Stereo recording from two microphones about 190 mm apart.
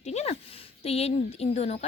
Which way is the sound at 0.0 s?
35° left (ahead or behind).